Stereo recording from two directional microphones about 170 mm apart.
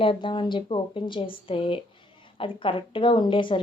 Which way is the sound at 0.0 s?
30° left (ahead or behind).